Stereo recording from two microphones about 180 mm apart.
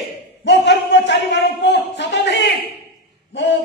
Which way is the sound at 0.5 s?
75° left (ahead or behind).